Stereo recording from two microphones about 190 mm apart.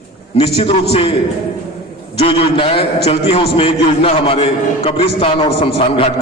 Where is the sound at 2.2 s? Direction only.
30° left (ahead or behind).